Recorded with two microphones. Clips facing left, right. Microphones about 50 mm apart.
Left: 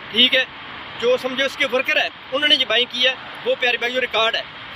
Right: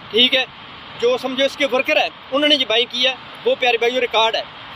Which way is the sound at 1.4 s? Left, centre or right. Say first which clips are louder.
Right 2 dB; left.